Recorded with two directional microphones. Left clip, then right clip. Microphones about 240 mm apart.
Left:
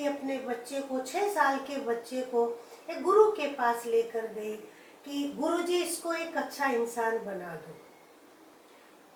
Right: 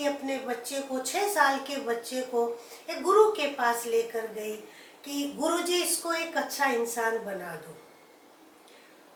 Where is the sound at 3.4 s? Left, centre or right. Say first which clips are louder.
Right 2 dB; centre.